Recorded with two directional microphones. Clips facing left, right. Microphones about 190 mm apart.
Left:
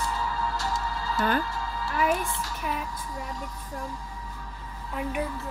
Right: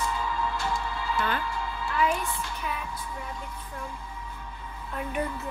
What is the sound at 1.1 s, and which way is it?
A woman's voice, 40° left (ahead or behind).